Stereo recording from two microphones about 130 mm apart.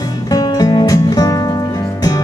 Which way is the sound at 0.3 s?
30° left (ahead or behind).